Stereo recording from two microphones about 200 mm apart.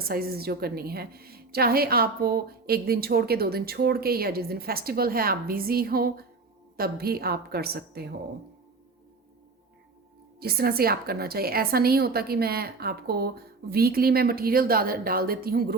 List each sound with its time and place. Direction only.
0.0 s a woman's voice: 50° right (ahead or behind)
10.4 s a woman's voice: 50° right (ahead or behind)